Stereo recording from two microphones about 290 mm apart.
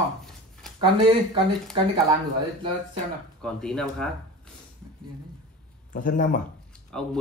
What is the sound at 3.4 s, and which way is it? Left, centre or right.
Speech, centre.